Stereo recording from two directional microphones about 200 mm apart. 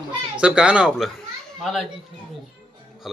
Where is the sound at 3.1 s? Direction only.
Centre (ahead or behind).